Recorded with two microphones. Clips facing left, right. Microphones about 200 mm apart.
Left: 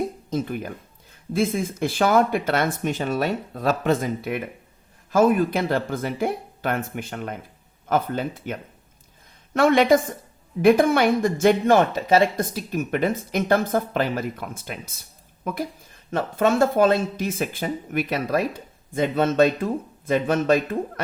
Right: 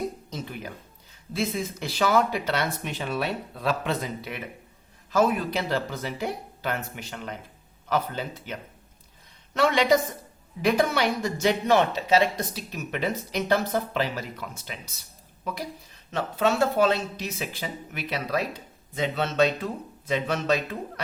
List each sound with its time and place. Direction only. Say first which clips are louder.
0.3 s speech: left 9 dB; 50° left (ahead or behind)
9.6 s speech: left 5 dB; 50° left (ahead or behind)
16.1 s speech: left 4 dB; 50° left (ahead or behind)